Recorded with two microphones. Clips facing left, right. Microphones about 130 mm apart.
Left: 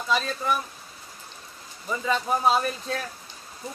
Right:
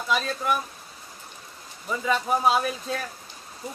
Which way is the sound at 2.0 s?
5° right (ahead or behind).